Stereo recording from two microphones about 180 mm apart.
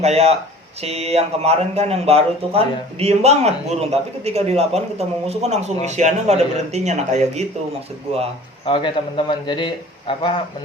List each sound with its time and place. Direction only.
0.0 s speech: 35° right (ahead or behind)
8.6 s a man's voice: 25° left (ahead or behind)